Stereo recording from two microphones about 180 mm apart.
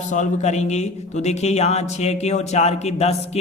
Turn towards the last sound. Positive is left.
turn(degrees=35)  # may be behind; listen again after turning